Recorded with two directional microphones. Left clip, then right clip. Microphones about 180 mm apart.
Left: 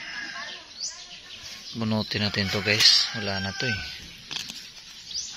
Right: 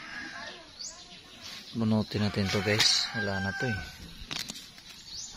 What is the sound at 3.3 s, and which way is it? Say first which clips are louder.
Speech: left 3 dB; 20° left (ahead or behind).